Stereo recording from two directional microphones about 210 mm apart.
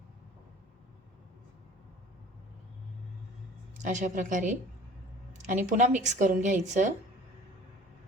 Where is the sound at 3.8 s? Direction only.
35° right (ahead or behind).